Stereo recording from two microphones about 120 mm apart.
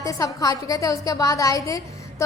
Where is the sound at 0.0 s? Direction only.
30° left (ahead or behind).